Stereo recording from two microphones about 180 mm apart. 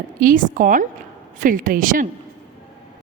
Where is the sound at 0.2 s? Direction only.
50° right (ahead or behind).